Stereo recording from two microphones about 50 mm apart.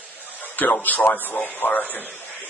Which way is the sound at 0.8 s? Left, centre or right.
Left.